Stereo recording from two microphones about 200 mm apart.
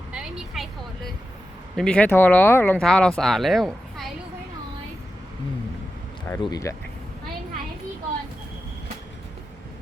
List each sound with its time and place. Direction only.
0.1 s a woman's voice: 5° right (ahead or behind)
6.4 s speech: 15° left (ahead or behind)